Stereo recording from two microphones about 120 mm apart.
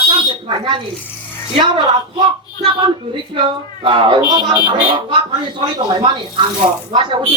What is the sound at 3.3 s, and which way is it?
Speech, 45° right (ahead or behind).